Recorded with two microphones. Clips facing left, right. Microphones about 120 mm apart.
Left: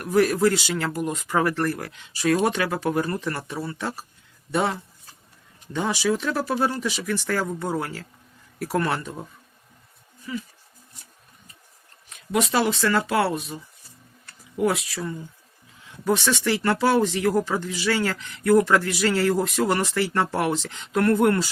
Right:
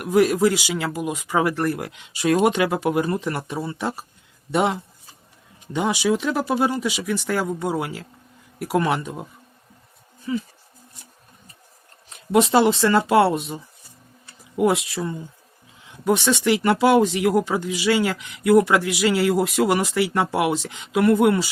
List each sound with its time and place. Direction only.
0.0 s speech: 15° right (ahead or behind)
10.3 s speech: 30° right (ahead or behind)
12.0 s speech: 25° right (ahead or behind); by 21.5 s 10° right (ahead or behind)